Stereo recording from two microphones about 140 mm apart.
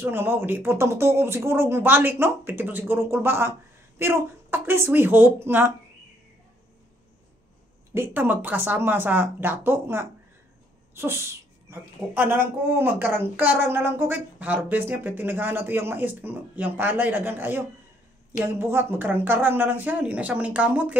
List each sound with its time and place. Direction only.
0.0 s speech: 15° right (ahead or behind)
7.9 s speech: 15° right (ahead or behind)